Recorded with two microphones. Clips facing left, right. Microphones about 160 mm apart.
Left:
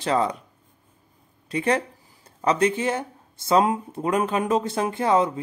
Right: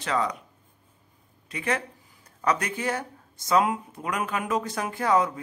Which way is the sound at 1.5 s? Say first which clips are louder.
Left 6 dB; 30° left (ahead or behind).